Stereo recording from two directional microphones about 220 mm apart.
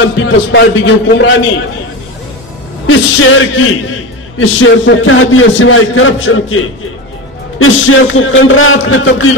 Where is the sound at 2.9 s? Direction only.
65° left (ahead or behind).